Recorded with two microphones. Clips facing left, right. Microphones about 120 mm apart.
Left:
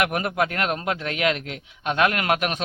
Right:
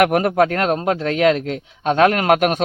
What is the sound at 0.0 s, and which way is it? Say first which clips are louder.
A man's voice: right 8 dB; 45° right (ahead or behind).